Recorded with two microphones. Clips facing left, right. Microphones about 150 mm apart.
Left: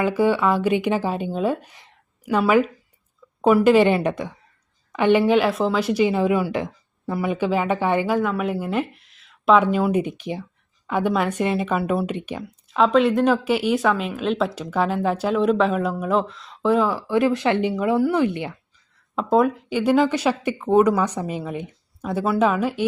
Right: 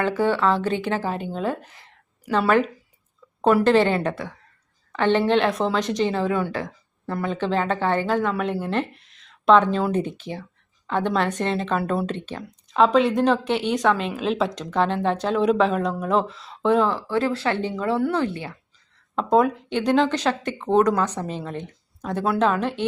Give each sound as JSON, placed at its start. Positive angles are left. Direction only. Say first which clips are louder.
{"t": 0.0, "sound": "speech", "louder": "left 2 dB", "side_deg": 10}
{"t": 2.2, "sound": "a woman's voice", "louder": "left 2 dB", "side_deg": 0}
{"t": 12.7, "sound": "a woman's voice", "louder": "left 1 dB", "side_deg": 0}
{"t": 19.1, "sound": "speech", "louder": "even", "side_deg": 0}